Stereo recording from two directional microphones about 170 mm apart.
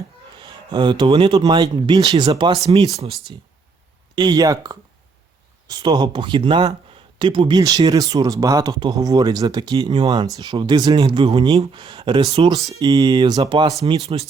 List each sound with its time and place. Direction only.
0.3 s speech: 25° right (ahead or behind)
2.9 s speech: 35° right (ahead or behind)
4.1 s speech: 25° right (ahead or behind)
12.5 s speech: 20° right (ahead or behind)
13.8 s speech: 35° right (ahead or behind)